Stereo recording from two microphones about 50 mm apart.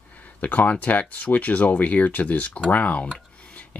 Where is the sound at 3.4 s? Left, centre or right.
Left.